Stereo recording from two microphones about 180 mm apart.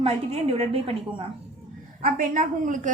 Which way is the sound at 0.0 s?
35° right (ahead or behind).